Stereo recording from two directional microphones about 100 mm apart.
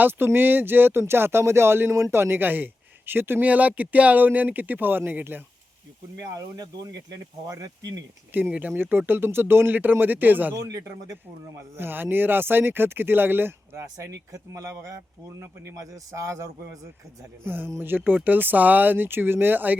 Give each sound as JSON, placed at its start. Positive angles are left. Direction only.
{"t": 0.0, "sound": "speech", "side_deg": -20}
{"t": 6.3, "sound": "a man's voice", "side_deg": -40}
{"t": 8.5, "sound": "speech", "side_deg": -20}
{"t": 10.7, "sound": "a man's voice", "side_deg": -35}
{"t": 11.8, "sound": "speech", "side_deg": -20}
{"t": 13.9, "sound": "a man's voice", "side_deg": -35}